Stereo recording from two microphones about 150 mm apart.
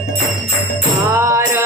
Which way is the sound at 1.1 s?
20° right (ahead or behind).